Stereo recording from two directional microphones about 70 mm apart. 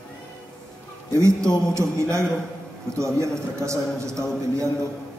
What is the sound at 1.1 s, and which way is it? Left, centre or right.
A man's voice, right.